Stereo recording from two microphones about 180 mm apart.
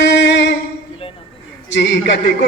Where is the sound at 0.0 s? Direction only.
75° left (ahead or behind).